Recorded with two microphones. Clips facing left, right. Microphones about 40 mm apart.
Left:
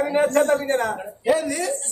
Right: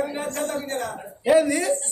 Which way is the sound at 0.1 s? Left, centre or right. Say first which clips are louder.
Left 9 dB; left.